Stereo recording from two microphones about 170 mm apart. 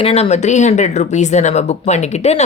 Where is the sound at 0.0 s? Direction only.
40° left (ahead or behind).